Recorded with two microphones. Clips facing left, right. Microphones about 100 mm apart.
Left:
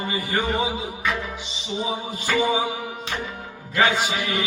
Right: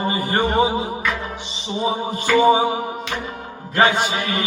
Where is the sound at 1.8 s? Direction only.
40° right (ahead or behind).